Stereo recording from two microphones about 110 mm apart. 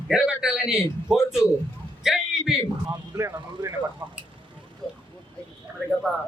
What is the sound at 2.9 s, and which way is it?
Speech, 25° right (ahead or behind).